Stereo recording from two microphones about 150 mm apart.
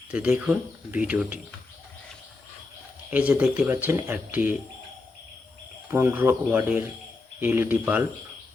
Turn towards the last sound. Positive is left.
turn(degrees=-10)  # may be behind; listen again after turning